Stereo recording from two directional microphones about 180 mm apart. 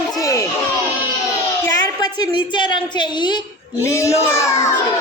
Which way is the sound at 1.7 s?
20° left (ahead or behind).